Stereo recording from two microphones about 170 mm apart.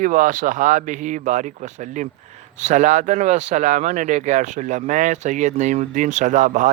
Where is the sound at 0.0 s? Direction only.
50° right (ahead or behind).